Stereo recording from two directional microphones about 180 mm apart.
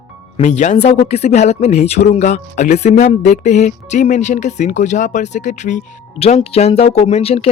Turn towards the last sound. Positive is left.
turn(degrees=35)  # may be behind; listen again after turning